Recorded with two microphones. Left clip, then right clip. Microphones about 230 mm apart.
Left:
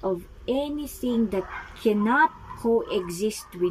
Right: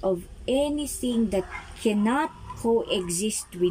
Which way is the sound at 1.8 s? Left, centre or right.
Centre.